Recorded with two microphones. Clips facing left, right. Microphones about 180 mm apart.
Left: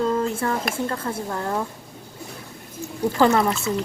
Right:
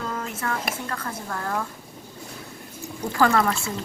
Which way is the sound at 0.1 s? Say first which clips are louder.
Left 7 dB; 30° left (ahead or behind).